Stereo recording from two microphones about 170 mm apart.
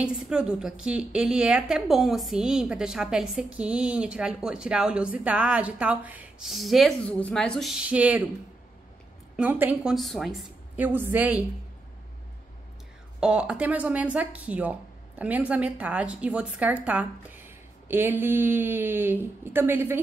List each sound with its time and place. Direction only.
0.0 s a woman's voice: 5° right (ahead or behind)
9.4 s speech: 10° right (ahead or behind)
13.2 s speech: 5° right (ahead or behind)